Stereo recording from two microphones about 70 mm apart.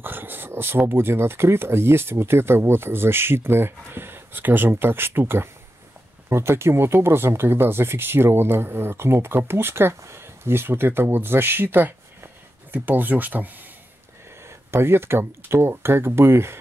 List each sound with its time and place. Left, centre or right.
0.0 s speech: right
14.7 s speech: right